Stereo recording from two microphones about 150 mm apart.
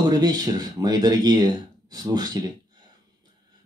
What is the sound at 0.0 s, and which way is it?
Speech, 25° right (ahead or behind).